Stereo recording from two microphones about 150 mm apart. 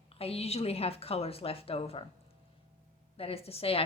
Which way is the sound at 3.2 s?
40° left (ahead or behind).